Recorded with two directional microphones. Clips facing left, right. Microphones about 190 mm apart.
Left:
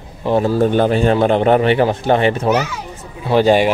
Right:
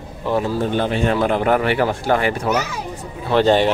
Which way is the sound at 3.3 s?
10° left (ahead or behind).